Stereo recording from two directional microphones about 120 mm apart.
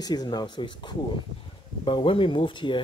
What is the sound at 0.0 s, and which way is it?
Speech, 35° left (ahead or behind).